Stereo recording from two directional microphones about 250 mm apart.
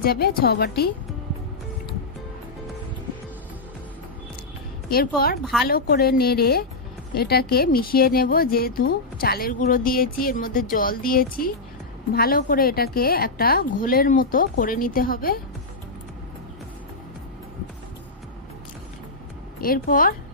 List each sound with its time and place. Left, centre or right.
0.0 s speech: left
4.8 s speech: left
5.4 s a woman's voice: centre
5.7 s speech: left
19.6 s speech: left